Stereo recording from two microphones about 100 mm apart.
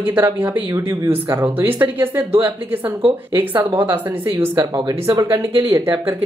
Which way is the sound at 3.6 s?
65° right (ahead or behind).